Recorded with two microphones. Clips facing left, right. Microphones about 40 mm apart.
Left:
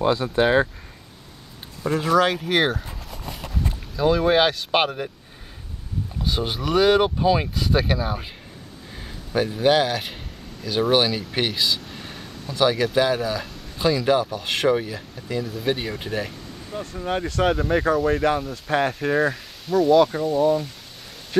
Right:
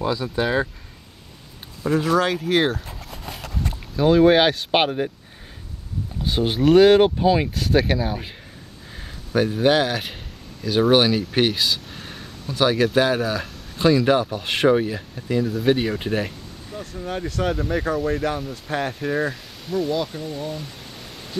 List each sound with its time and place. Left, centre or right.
0.0 s speech: left
1.9 s speech: centre
3.9 s speech: centre
6.2 s speech: centre
16.8 s speech: left
17.6 s speech: centre
18.9 s speech: centre
19.7 s speech: left